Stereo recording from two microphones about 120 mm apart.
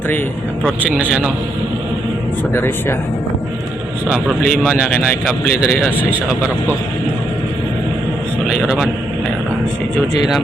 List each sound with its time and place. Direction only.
0.9 s a man's voice: 5° right (ahead or behind)
2.5 s speech: 20° left (ahead or behind)
4.1 s a man's voice: 5° right (ahead or behind)
8.4 s a man's voice: 5° right (ahead or behind)